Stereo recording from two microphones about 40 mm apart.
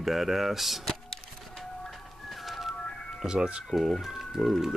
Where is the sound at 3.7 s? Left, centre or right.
Centre.